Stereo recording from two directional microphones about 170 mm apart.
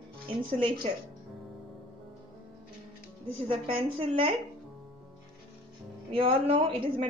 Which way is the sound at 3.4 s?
30° right (ahead or behind).